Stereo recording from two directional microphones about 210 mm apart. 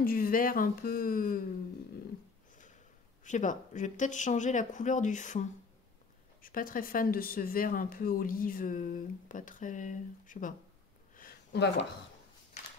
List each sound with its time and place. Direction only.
0.0 s a woman's voice: 45° left (ahead or behind)
3.3 s a woman's voice: 35° left (ahead or behind)
11.1 s a sound: 50° left (ahead or behind)